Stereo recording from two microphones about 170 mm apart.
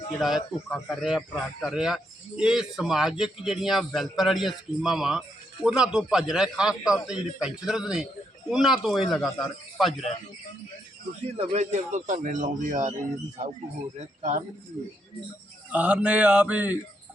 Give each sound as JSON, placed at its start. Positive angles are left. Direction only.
{"t": 0.2, "sound": "a man's voice", "side_deg": 0}
{"t": 11.3, "sound": "a man's voice", "side_deg": -40}
{"t": 14.2, "sound": "a man's voice", "side_deg": -45}
{"t": 15.7, "sound": "mantra", "side_deg": -10}